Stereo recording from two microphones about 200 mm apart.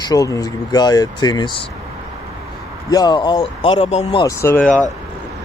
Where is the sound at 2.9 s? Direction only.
20° left (ahead or behind).